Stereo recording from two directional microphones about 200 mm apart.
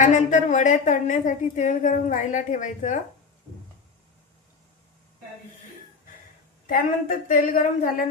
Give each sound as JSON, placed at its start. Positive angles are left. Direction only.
{"t": 0.0, "sound": "a woman's voice", "side_deg": 40}
{"t": 6.7, "sound": "a woman's voice", "side_deg": 45}